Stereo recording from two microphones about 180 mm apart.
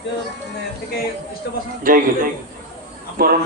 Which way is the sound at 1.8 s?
50° right (ahead or behind).